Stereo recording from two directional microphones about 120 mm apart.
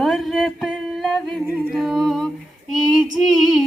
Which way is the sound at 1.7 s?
5° right (ahead or behind).